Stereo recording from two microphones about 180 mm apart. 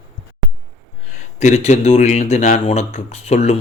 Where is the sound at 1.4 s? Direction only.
40° left (ahead or behind).